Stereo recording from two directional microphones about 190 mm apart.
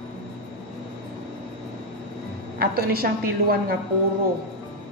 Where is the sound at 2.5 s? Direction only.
55° right (ahead or behind).